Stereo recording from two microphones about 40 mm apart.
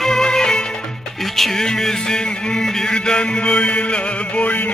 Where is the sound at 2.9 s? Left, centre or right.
Left.